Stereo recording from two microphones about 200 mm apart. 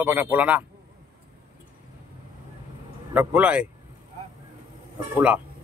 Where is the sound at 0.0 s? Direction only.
10° right (ahead or behind).